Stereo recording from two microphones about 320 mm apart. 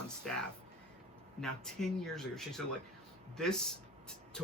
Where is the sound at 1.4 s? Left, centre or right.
Centre.